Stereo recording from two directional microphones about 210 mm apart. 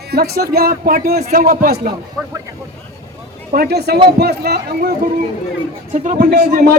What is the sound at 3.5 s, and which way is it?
A man's voice, 50° right (ahead or behind).